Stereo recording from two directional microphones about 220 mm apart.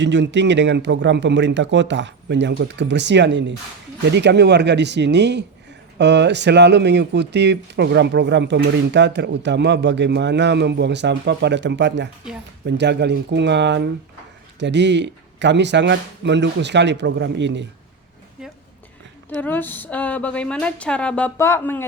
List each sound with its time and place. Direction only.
0.0 s speech: 55° right (ahead or behind)
19.3 s speech: 5° left (ahead or behind)